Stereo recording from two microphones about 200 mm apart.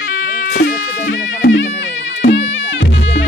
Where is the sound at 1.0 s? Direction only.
70° left (ahead or behind).